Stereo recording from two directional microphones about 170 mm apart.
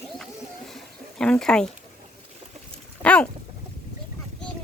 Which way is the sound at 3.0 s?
5° left (ahead or behind).